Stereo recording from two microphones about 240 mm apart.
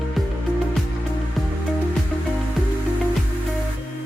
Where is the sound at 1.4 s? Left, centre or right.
Centre.